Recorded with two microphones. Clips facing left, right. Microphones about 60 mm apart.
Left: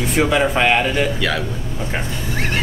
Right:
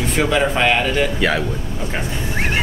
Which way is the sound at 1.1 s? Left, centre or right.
Centre.